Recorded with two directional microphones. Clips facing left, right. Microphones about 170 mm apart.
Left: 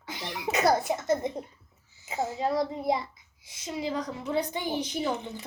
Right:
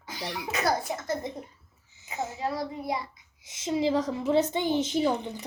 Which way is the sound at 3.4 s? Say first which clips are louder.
Right 6 dB; 20° right (ahead or behind).